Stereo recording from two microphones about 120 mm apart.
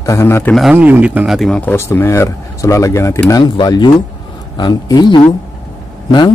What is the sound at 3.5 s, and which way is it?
Speech, 40° left (ahead or behind).